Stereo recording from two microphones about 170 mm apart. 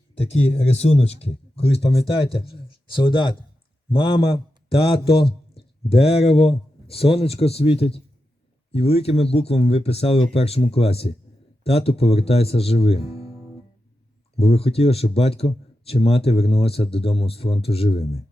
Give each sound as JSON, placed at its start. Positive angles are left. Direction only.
{"t": 0.1, "sound": "a man's voice", "side_deg": 35}
{"t": 14.3, "sound": "speech", "side_deg": 35}